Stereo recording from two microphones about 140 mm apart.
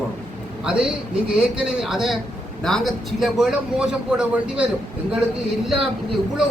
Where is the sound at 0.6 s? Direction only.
5° right (ahead or behind).